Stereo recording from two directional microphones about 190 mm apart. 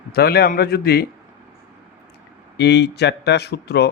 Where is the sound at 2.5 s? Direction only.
65° left (ahead or behind).